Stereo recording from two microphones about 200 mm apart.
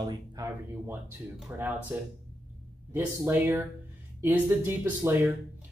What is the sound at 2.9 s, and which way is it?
Speech, 10° right (ahead or behind).